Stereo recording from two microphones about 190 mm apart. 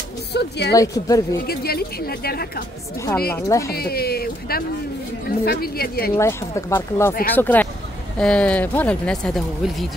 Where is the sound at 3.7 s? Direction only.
55° left (ahead or behind).